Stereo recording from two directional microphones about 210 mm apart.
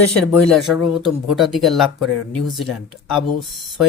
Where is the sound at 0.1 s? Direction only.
Centre (ahead or behind).